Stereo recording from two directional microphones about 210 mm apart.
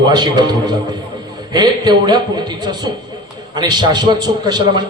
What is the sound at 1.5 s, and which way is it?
Speech, 20° right (ahead or behind).